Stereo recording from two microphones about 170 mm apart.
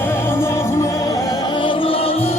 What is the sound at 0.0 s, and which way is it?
Music, 15° left (ahead or behind).